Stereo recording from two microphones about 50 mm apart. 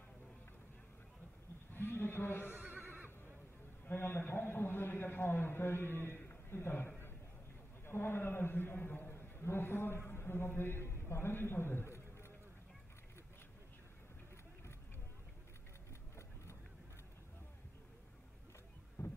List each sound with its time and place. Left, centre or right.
1.7 s a sound: left
2.5 s neigh: right
3.8 s a man's voice: left
9.1 s a man's voice: left
19.0 s boat: left